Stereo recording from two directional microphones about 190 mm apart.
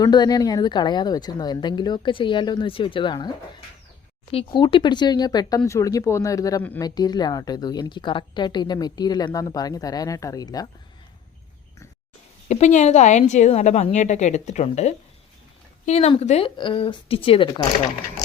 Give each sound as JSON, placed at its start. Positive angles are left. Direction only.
{"t": 0.0, "sound": "a woman's voice", "side_deg": 20}
{"t": 4.3, "sound": "a woman's voice", "side_deg": 25}
{"t": 12.5, "sound": "a woman's voice", "side_deg": 35}